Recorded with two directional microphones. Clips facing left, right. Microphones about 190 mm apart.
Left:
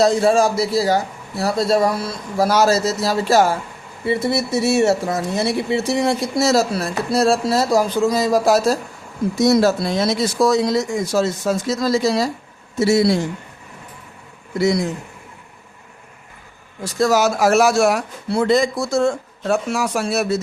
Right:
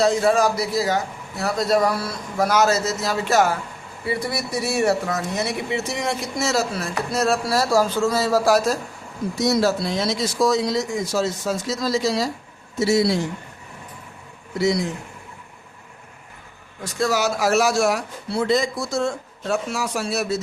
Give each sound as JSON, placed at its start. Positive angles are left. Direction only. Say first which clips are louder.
{"t": 0.0, "sound": "a man's voice", "louder": "left 3 dB", "side_deg": 30}
{"t": 9.4, "sound": "speech", "louder": "left 5 dB", "side_deg": 50}
{"t": 16.8, "sound": "speech", "louder": "left 5 dB", "side_deg": 40}